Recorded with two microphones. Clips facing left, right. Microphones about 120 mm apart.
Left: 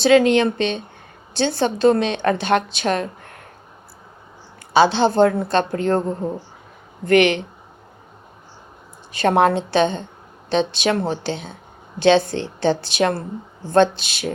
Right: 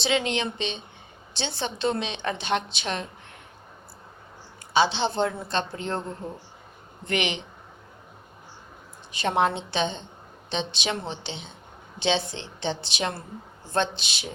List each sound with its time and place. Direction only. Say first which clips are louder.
0.0 s a woman's voice: left 12 dB; 50° left (ahead or behind)
4.7 s a woman's voice: left 8 dB; 50° left (ahead or behind)
7.1 s a woman's voice: left 13 dB; 50° left (ahead or behind)
9.1 s a woman's voice: left 8 dB; 50° left (ahead or behind)